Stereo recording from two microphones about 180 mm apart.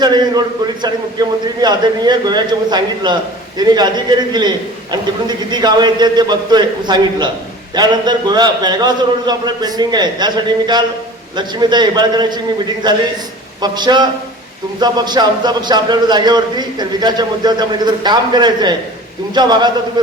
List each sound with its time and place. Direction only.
0.0 s a man's voice: 25° right (ahead or behind)